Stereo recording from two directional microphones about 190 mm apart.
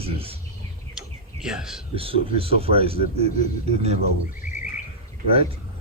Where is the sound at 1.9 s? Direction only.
30° right (ahead or behind).